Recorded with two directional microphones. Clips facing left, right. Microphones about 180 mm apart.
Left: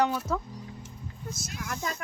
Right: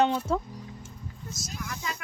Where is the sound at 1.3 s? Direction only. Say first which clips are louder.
Left 1 dB; 55° left (ahead or behind).